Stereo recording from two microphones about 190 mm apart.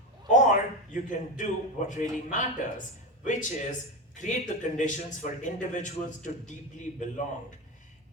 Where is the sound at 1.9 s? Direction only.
40° left (ahead or behind).